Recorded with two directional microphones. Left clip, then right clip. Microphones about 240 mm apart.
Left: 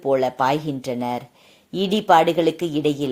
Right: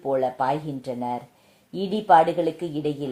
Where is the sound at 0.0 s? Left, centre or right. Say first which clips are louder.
Left 4 dB; left.